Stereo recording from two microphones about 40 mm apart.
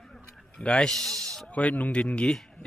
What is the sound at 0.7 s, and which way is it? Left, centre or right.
Speech, left.